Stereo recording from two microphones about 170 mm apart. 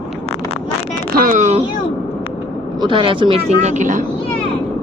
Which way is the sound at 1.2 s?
50° right (ahead or behind).